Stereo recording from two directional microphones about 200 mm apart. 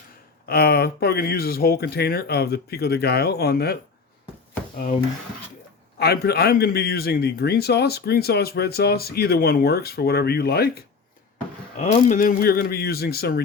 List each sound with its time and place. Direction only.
0.4 s a man's voice: 50° left (ahead or behind)
6.0 s a man's voice: 50° left (ahead or behind)
11.8 s a man's voice: 40° left (ahead or behind)